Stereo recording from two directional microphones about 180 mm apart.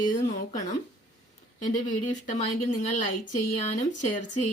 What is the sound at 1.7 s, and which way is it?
Speech, 45° left (ahead or behind).